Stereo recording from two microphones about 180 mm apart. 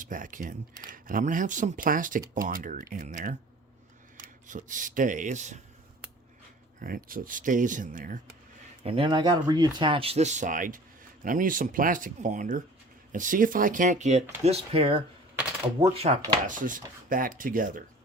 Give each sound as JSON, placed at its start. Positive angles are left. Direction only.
{"t": 0.0, "sound": "speech", "side_deg": -50}
{"t": 4.4, "sound": "speech", "side_deg": -45}
{"t": 6.8, "sound": "speech", "side_deg": -50}
{"t": 8.8, "sound": "speech", "side_deg": -30}
{"t": 16.1, "sound": "speech", "side_deg": -40}